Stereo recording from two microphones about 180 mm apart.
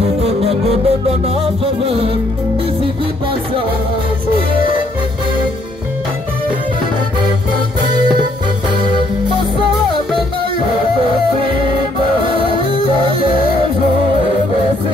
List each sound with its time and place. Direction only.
0.2 s music: 35° right (ahead or behind)
11.0 s music: 30° right (ahead or behind)